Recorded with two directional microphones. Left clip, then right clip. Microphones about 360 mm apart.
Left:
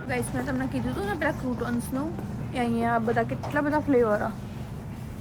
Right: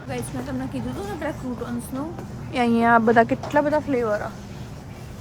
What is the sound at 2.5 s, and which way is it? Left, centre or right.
Speech, right.